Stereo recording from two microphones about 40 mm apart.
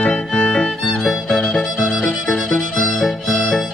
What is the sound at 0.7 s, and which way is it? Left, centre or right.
Music, centre.